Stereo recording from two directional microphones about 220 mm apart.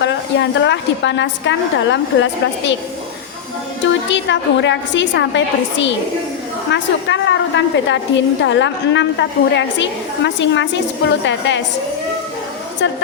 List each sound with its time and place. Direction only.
0.0 s a woman's voice: 55° left (ahead or behind)
4.1 s a woman's voice: 55° left (ahead or behind)
12.8 s a woman's voice: 55° left (ahead or behind)